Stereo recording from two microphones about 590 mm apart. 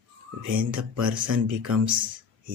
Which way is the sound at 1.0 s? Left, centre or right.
Right.